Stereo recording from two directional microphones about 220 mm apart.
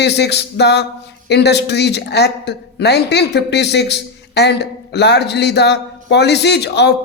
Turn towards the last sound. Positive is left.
turn(degrees=50)  # may be behind; listen again after turning